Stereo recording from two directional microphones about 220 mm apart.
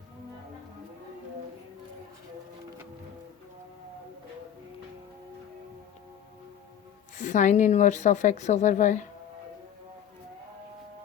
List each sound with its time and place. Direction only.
7.2 s speech: 35° left (ahead or behind)